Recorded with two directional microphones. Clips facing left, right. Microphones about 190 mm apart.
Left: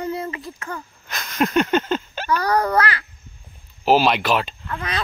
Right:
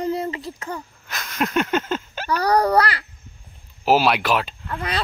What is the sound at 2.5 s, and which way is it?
Speech, 15° right (ahead or behind).